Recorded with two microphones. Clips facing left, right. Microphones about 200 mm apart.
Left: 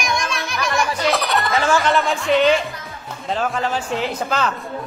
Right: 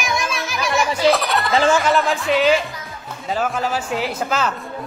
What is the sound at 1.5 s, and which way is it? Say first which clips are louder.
Speech: right 3 dB; 30° right (ahead or behind).